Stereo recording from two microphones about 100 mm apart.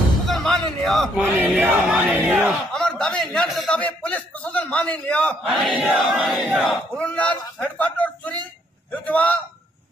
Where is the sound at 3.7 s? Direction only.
15° left (ahead or behind).